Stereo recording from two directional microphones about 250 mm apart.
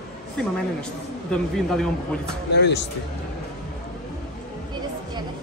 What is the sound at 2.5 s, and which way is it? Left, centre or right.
Speech, left.